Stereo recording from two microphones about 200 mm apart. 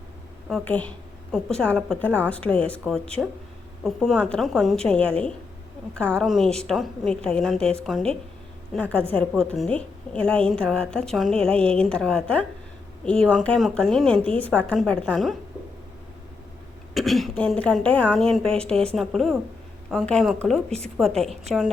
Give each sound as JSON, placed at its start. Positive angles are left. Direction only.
{"t": 0.4, "sound": "a woman's voice", "side_deg": 5}
{"t": 16.9, "sound": "a woman's voice", "side_deg": 0}